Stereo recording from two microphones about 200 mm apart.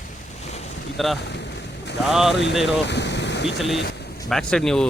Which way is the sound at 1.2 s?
60° left (ahead or behind).